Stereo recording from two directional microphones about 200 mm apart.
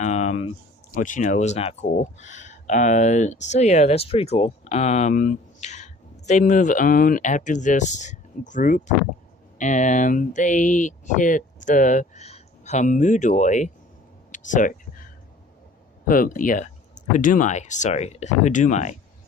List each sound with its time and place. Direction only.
0.0 s speech: 35° left (ahead or behind)
16.0 s speech: 45° left (ahead or behind)